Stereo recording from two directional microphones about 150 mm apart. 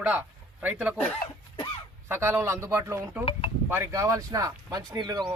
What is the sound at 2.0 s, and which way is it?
Speech, 15° right (ahead or behind).